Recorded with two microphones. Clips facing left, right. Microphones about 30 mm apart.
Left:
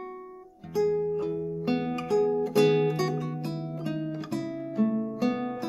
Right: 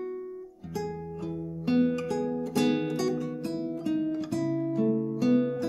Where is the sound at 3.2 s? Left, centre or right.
Centre.